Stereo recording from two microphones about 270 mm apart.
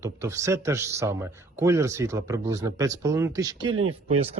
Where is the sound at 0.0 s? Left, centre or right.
Centre.